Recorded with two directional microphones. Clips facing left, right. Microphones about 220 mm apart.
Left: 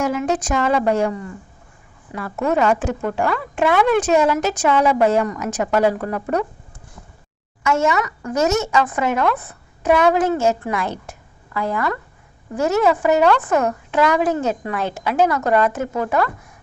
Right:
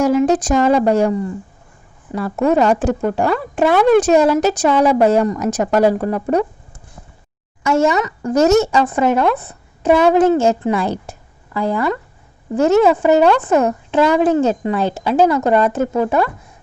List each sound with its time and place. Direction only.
0.0 s a woman's voice: 35° right (ahead or behind)
7.6 s a woman's voice: 35° right (ahead or behind)